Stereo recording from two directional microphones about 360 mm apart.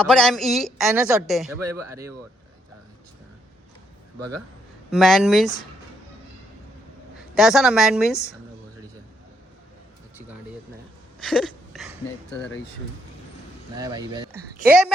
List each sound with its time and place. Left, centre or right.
0.0 s a woman's voice: centre
4.9 s a woman's voice: centre
7.3 s a woman's voice: centre
11.2 s a sound: centre
13.7 s a woman's voice: centre